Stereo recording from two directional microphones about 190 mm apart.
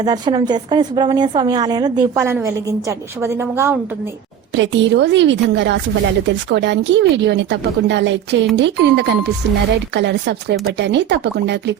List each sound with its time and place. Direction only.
0.0 s a woman's voice: 20° right (ahead or behind)
4.5 s speech: 70° right (ahead or behind)